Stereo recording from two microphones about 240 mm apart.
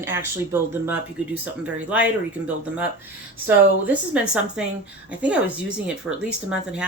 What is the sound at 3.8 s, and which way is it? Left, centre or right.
Speech, centre.